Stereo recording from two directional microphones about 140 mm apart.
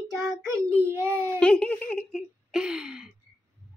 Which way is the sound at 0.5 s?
20° right (ahead or behind).